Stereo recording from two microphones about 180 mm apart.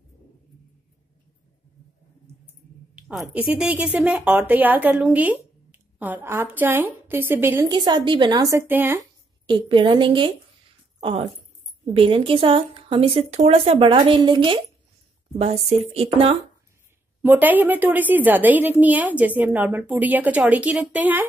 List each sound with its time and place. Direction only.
3.0 s a woman's voice: 5° right (ahead or behind)
7.7 s speech: 25° right (ahead or behind)
9.5 s speech: 25° right (ahead or behind)
17.2 s a woman's voice: 10° right (ahead or behind)